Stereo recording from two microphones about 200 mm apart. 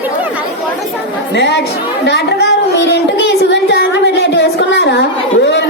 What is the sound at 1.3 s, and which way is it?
Speech, 60° left (ahead or behind).